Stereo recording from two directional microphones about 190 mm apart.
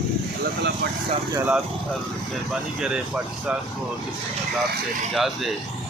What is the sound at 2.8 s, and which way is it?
Speech, 5° right (ahead or behind).